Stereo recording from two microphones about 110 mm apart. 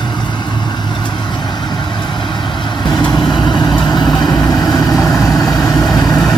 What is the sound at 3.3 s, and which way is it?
Vehicle, 45° left (ahead or behind).